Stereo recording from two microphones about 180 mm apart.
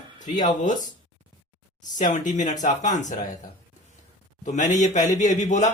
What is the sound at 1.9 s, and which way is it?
A man's voice, 45° left (ahead or behind).